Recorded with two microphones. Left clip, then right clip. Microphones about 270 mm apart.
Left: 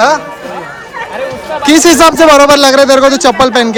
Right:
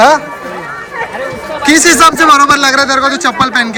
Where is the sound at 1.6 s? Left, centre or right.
Centre.